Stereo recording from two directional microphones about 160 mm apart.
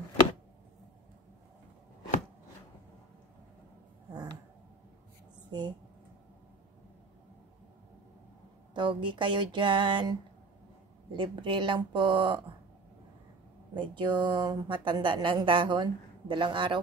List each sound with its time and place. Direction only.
4.1 s a sound: 25° right (ahead or behind)
8.7 s speech: 30° right (ahead or behind)
13.7 s speech: 30° right (ahead or behind)